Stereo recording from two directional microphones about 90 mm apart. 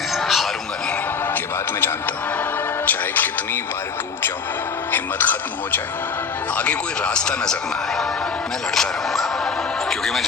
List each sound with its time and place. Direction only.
0.1 s a sound: centre (ahead or behind)
2.8 s radio: 20° left (ahead or behind)
4.9 s speech: 20° left (ahead or behind)
8.7 s speech: 5° left (ahead or behind)